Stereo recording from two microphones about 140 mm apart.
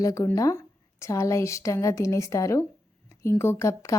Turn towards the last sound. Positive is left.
turn(degrees=20)  # may be behind; listen again after turning